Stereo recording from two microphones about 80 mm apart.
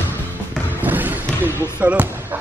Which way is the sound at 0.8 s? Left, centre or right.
Right.